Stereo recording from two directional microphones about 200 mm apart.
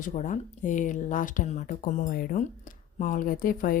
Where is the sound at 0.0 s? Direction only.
40° left (ahead or behind).